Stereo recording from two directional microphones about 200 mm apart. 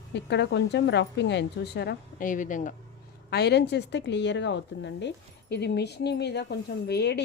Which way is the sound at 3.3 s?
55° left (ahead or behind).